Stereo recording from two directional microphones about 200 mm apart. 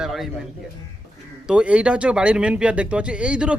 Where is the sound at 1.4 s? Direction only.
5° right (ahead or behind).